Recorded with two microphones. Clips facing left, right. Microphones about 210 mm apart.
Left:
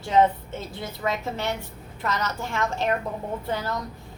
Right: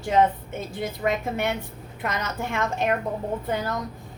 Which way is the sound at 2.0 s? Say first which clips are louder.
Even; 20° right (ahead or behind).